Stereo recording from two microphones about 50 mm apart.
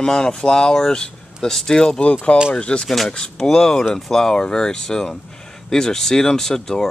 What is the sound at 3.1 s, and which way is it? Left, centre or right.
Speech, centre.